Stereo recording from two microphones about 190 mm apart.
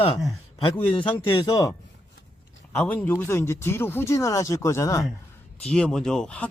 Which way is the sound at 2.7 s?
10° left (ahead or behind).